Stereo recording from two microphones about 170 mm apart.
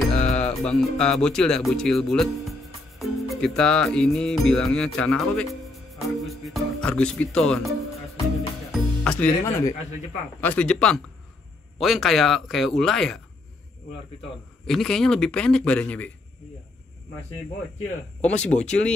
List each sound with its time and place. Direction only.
0.1 s speech: 5° left (ahead or behind)
3.0 s music: centre (ahead or behind)
8.7 s music: 5° left (ahead or behind)
9.4 s speech: 20° left (ahead or behind)
10.4 s speech: 5° left (ahead or behind)
14.7 s speech: 5° left (ahead or behind)
18.2 s speech: 5° left (ahead or behind)